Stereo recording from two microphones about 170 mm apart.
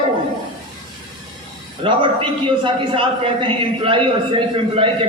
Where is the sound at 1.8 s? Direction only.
30° right (ahead or behind).